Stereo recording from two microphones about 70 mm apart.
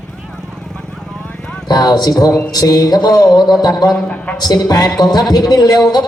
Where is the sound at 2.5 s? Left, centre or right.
Left.